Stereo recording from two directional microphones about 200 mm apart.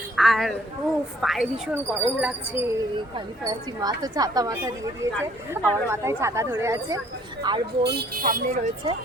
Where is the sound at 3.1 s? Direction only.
20° right (ahead or behind).